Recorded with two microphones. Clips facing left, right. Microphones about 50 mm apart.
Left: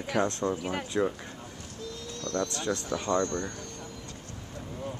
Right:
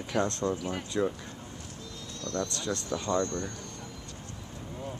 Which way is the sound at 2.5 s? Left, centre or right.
Left.